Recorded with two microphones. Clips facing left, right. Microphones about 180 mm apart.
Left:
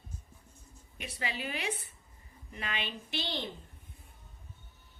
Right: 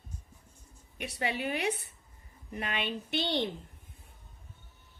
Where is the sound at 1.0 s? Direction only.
60° right (ahead or behind).